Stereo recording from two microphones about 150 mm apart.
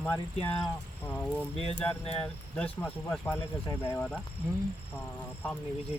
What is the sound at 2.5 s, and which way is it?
Speech, 5° left (ahead or behind).